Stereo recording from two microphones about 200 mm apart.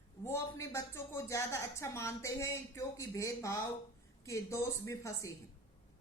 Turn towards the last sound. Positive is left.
turn(degrees=15)  # may be behind; listen again after turning